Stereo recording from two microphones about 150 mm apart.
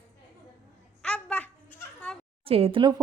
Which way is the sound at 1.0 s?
5° left (ahead or behind).